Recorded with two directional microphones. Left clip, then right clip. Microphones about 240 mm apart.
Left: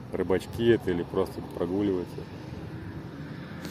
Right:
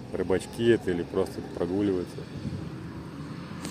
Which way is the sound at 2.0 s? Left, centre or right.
Right.